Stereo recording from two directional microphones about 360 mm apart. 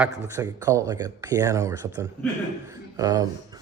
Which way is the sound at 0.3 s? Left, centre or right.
Centre.